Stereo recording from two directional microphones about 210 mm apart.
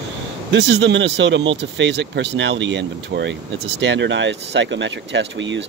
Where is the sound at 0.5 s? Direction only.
55° right (ahead or behind).